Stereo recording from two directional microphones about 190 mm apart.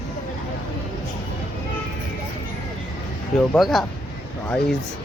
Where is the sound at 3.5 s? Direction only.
Centre (ahead or behind).